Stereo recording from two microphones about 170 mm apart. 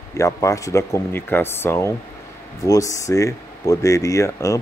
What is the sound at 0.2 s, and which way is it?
Speech, 20° left (ahead or behind).